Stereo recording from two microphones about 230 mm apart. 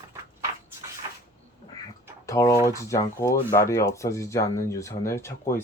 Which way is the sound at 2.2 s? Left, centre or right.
Centre.